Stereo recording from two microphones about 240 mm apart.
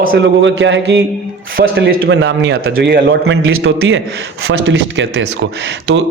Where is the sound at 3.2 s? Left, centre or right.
Right.